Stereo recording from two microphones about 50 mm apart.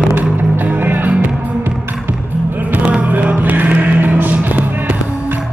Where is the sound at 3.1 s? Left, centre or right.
Right.